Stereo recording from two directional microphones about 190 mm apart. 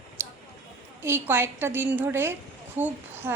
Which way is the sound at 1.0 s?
10° right (ahead or behind).